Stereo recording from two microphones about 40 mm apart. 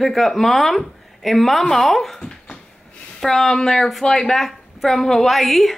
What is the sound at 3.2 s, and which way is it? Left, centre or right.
Speech, centre.